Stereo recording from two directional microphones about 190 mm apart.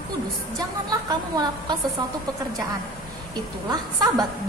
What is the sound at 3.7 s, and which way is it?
Speech, 20° right (ahead or behind).